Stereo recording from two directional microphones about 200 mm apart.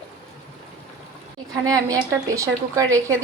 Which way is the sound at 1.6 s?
15° right (ahead or behind).